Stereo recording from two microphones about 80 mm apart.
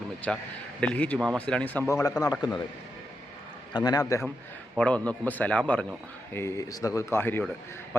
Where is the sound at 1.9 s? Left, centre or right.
Left.